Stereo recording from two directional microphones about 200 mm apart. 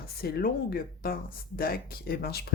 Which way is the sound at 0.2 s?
50° left (ahead or behind).